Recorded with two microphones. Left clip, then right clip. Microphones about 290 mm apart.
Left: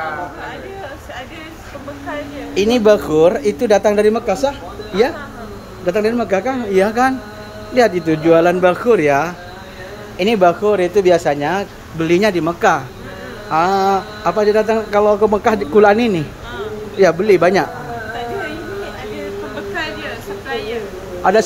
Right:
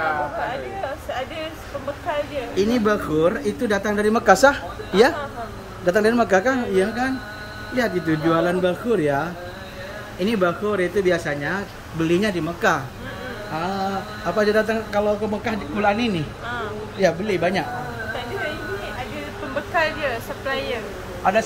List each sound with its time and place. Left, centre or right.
2.5 s speech: centre
4.1 s a woman's voice: centre
19.7 s a sound: centre